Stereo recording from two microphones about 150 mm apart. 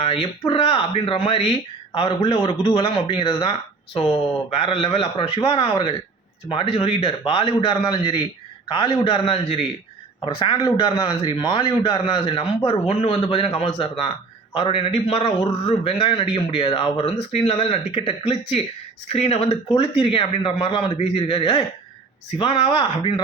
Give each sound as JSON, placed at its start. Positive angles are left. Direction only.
{"t": 0.0, "sound": "a man's voice", "side_deg": 40}